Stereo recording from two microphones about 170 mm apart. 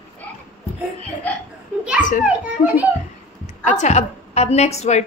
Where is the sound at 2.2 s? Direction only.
10° right (ahead or behind).